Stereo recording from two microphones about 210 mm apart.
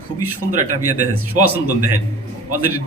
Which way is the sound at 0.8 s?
90° right.